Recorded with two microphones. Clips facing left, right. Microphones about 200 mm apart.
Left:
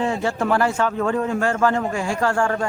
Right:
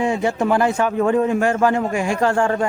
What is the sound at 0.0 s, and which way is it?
A man's voice, 15° right (ahead or behind).